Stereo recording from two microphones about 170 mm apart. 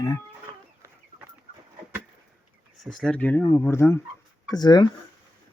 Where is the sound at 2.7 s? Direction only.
Centre (ahead or behind); by 4.9 s 25° left (ahead or behind).